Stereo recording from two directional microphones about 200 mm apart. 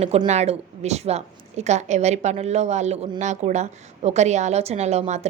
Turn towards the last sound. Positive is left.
turn(degrees=-35)  # may be behind; listen again after turning